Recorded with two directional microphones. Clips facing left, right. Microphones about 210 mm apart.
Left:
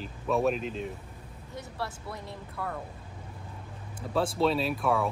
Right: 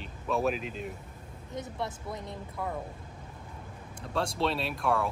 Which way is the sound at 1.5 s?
20° right (ahead or behind).